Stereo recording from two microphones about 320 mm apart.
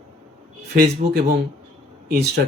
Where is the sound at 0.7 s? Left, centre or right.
Right.